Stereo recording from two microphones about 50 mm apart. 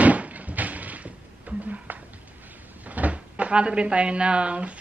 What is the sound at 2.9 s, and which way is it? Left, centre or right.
Speech, right.